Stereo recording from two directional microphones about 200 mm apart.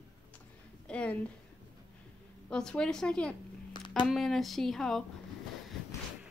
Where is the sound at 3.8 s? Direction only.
20° left (ahead or behind).